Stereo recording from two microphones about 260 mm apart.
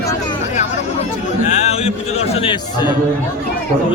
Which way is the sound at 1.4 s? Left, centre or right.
Left.